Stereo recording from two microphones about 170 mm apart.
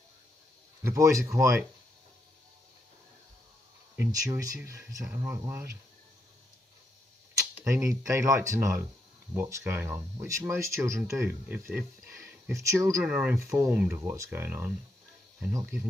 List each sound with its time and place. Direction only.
0.8 s speech: 20° right (ahead or behind)
3.9 s speech: 15° right (ahead or behind)
7.3 s speech: 20° right (ahead or behind)